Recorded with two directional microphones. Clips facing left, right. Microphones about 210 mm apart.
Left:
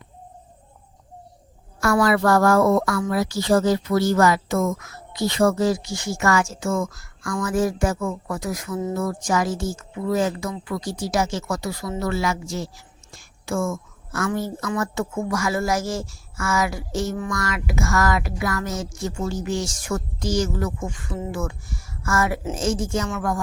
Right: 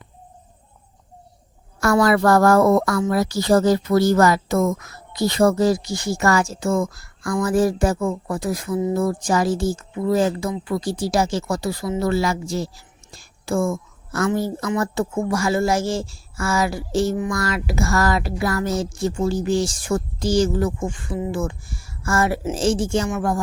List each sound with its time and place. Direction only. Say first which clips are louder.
1.8 s a woman's voice: right 2 dB; 40° right (ahead or behind)